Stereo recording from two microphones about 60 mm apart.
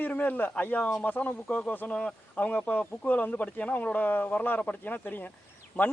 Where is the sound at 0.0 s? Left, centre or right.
Left.